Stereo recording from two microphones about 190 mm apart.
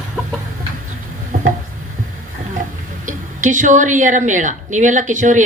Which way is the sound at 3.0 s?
40° right (ahead or behind).